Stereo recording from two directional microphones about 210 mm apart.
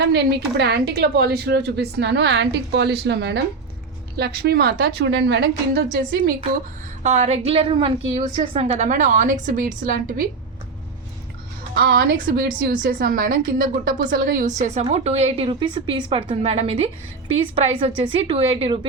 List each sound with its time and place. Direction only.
0.0 s a woman's voice: 50° right (ahead or behind)
7.0 s a woman's voice: 30° right (ahead or behind)
11.7 s a woman's voice: 50° right (ahead or behind); by 18.9 s 25° right (ahead or behind)